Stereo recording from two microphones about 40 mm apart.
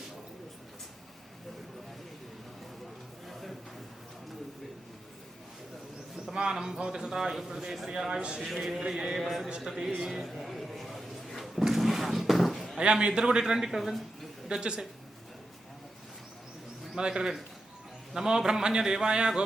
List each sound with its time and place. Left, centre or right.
3.2 s a sound: centre
6.3 s a man's voice: centre
8.4 s speech: centre
9.0 s mantra: centre
9.6 s speech: centre
10.2 s a sound: centre
12.8 s a man's voice: right; by 13.9 s centre
14.5 s a man's voice: centre
16.9 s speech: centre